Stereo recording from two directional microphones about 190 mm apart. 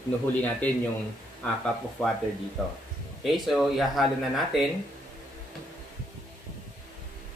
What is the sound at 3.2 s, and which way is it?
Speech, centre (ahead or behind).